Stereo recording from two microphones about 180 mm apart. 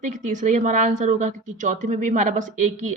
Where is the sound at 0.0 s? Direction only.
45° right (ahead or behind).